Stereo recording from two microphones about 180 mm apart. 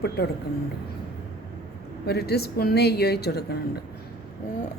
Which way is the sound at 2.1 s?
60° left (ahead or behind).